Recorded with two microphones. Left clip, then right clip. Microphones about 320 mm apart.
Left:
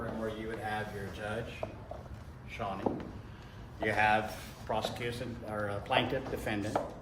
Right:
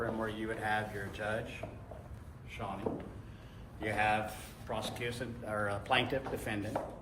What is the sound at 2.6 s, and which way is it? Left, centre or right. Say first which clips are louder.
Speech: left 4 dB; centre.